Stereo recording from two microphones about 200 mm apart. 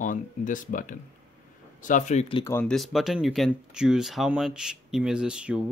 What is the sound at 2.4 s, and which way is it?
Speech, 10° left (ahead or behind).